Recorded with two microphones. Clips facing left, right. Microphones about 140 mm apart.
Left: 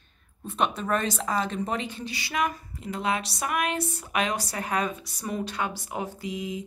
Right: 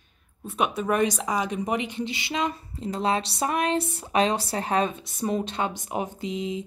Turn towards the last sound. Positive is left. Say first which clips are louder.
# right 3 dB
turn(degrees=-25)  # may be behind; listen again after turning